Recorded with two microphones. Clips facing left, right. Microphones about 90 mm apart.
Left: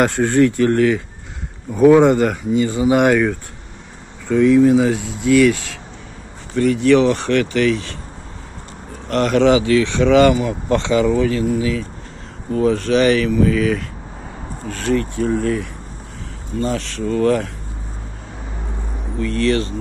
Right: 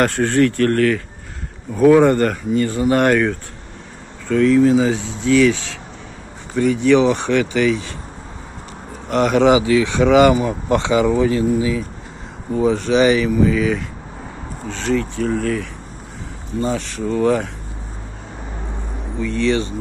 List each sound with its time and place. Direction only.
0.0 s speech: 15° left (ahead or behind); by 7.9 s 5° right (ahead or behind)
9.1 s speech: 5° right (ahead or behind)
10.3 s speech: 25° right (ahead or behind)
10.8 s speech: 10° right (ahead or behind)
12.5 s speech: 5° right (ahead or behind)
14.7 s speech: 10° left (ahead or behind)
16.6 s speech: 5° right (ahead or behind)
19.1 s speech: centre (ahead or behind)